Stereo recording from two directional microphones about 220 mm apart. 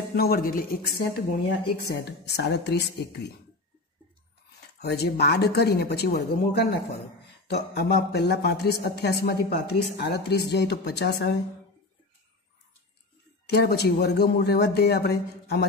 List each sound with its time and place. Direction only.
0.1 s speech: 45° left (ahead or behind)
4.7 s speech: 45° left (ahead or behind)
13.5 s speech: 50° left (ahead or behind)